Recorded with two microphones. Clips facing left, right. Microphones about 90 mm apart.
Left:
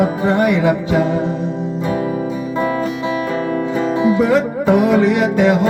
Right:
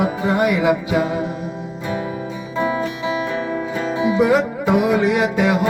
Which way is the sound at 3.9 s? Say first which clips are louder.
Left 1 dB; 15° right (ahead or behind).